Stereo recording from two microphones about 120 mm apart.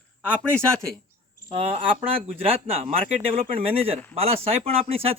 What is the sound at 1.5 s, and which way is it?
Speech, 50° right (ahead or behind).